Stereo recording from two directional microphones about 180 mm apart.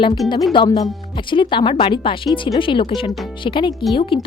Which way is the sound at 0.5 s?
25° left (ahead or behind).